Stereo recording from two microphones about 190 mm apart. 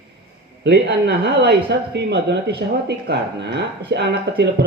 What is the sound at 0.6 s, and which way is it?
Speech, 65° right (ahead or behind).